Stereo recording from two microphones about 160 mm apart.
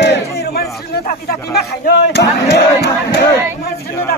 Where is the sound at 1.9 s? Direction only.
90° left.